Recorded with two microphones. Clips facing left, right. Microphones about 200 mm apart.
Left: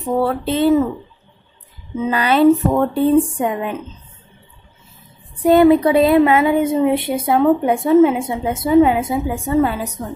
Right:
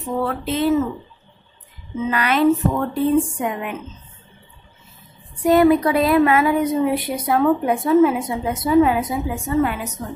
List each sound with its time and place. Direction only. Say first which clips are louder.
0.0 s speech: left 5 dB; 35° left (ahead or behind)
2.0 s speech: left 4 dB; 30° left (ahead or behind)
5.3 s speech: left 3 dB; 30° left (ahead or behind)